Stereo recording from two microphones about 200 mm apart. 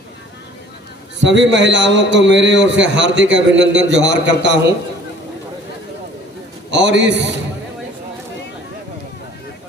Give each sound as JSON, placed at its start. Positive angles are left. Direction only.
{"t": 1.2, "sound": "a man's voice", "side_deg": -65}
{"t": 6.7, "sound": "a man's voice", "side_deg": -60}